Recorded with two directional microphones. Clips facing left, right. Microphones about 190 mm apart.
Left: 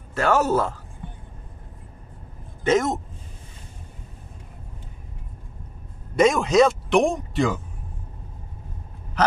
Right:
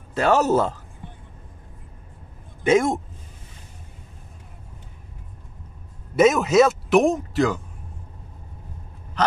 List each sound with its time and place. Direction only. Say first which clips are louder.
0.1 s speech: right 2 dB; 20° right (ahead or behind)
2.6 s speech: right 2 dB; 10° right (ahead or behind)
6.1 s speech: right 1 dB; 5° right (ahead or behind)